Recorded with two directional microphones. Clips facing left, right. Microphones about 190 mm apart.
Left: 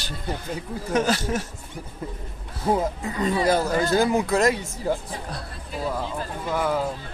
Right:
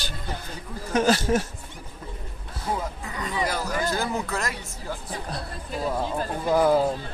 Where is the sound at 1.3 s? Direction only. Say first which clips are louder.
Right 4 dB; 35° right (ahead or behind).